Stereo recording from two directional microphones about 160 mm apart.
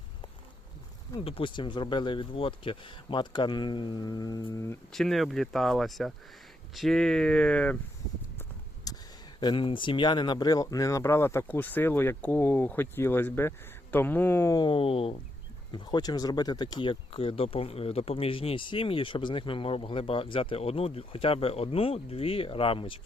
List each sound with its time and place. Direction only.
1.2 s speech: 35° left (ahead or behind); by 4.8 s 20° left (ahead or behind)
4.9 s speech: centre (ahead or behind)
8.9 s a sound: 25° left (ahead or behind)
9.4 s speech: 30° left (ahead or behind); by 14.5 s 15° left (ahead or behind)
14.5 s speech: 30° left (ahead or behind)